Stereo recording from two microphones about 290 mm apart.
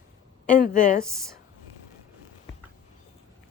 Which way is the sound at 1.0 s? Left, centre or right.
Centre.